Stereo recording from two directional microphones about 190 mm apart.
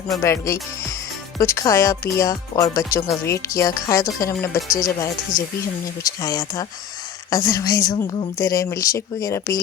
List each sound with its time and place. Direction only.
0.2 s speech: 15° left (ahead or behind)